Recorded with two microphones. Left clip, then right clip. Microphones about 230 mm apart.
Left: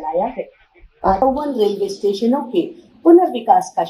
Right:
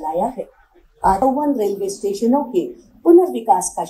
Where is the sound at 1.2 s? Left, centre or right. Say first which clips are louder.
Left 1 dB; left.